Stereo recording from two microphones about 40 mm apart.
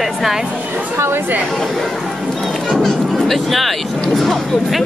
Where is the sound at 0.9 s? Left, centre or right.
Right.